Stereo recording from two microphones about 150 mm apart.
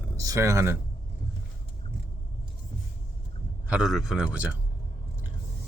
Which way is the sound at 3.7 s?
5° right (ahead or behind).